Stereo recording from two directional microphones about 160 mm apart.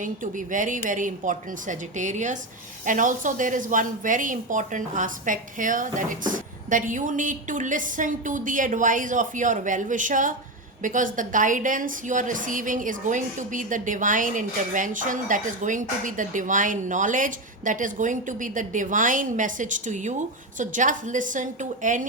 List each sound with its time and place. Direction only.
0.0 s a woman's voice: 55° right (ahead or behind)